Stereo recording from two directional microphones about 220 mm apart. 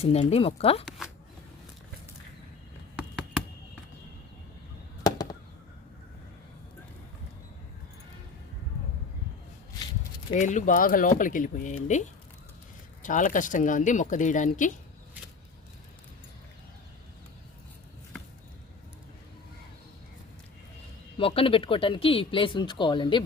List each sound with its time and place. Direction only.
0.0 s speech: 25° left (ahead or behind)
5.0 s a sound: 15° left (ahead or behind)
10.3 s speech: 35° left (ahead or behind)
13.0 s speech: 35° left (ahead or behind)
21.2 s speech: 25° left (ahead or behind)